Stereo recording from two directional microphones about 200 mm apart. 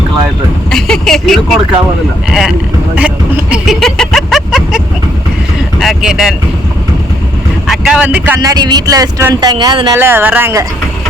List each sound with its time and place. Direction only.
0.7 s speech: centre (ahead or behind)
5.8 s speech: centre (ahead or behind)
7.7 s speech: 5° right (ahead or behind)